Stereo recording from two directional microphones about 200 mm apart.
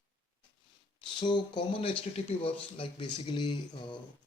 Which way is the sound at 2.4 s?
25° left (ahead or behind).